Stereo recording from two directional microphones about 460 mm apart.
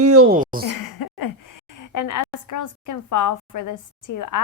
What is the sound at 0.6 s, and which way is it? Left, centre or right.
A woman's voice, left.